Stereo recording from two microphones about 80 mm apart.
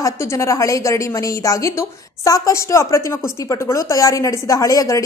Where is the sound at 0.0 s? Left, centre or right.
Left.